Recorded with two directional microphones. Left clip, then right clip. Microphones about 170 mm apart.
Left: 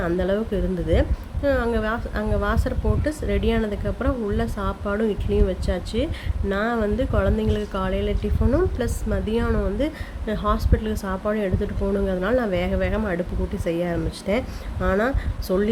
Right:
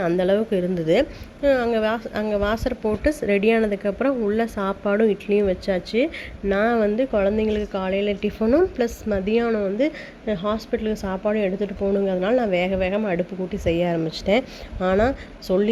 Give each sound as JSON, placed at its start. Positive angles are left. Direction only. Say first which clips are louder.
{"t": 0.0, "sound": "speech", "louder": "right 3 dB", "side_deg": -20}
{"t": 3.0, "sound": "a woman's voice", "louder": "right 7 dB", "side_deg": -30}